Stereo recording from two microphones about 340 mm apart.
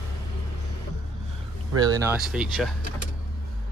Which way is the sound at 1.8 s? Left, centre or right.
Centre.